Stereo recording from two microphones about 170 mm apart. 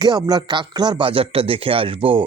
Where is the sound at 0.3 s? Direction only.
25° right (ahead or behind).